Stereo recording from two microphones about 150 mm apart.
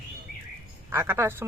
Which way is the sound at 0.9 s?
15° right (ahead or behind).